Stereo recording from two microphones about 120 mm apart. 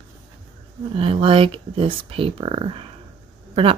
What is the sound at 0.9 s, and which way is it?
Speech, 50° right (ahead or behind).